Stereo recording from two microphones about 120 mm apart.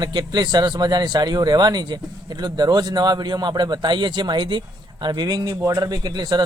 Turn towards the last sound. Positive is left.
turn(degrees=-35)  # may be behind; listen again after turning